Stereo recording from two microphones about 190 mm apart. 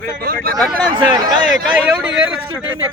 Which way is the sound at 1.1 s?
25° right (ahead or behind).